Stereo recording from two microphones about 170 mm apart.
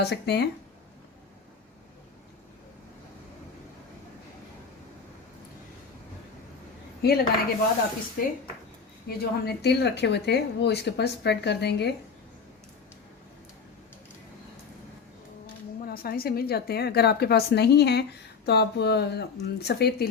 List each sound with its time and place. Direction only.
0.0 s a woman's voice: 75° left (ahead or behind)
7.0 s a woman's voice: 70° left (ahead or behind)
8.2 s speech: 55° left (ahead or behind)
9.0 s speech: 70° left (ahead or behind)
15.9 s a woman's voice: 60° left (ahead or behind)